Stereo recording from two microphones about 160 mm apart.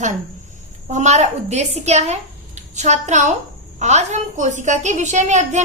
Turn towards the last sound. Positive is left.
turn(degrees=-45)  # may be behind; listen again after turning